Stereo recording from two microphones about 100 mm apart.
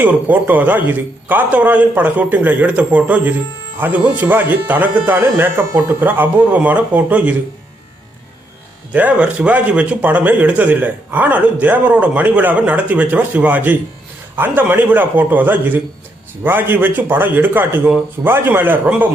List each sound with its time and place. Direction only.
0.0 s speech: 20° right (ahead or behind)
8.9 s speech: 15° right (ahead or behind)